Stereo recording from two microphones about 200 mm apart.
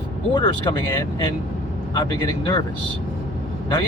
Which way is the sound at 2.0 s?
25° left (ahead or behind).